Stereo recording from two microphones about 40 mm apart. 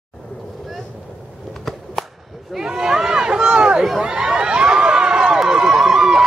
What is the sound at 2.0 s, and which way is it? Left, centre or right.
Whip, centre.